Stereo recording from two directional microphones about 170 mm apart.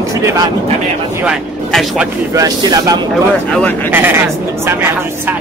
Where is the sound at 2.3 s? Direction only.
20° right (ahead or behind).